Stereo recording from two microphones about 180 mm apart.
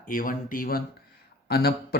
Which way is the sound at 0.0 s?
50° left (ahead or behind).